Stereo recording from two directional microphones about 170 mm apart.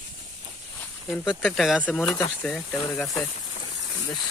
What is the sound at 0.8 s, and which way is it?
Speech, 10° left (ahead or behind).